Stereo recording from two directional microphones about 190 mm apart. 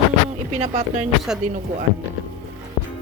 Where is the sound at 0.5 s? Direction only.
35° right (ahead or behind).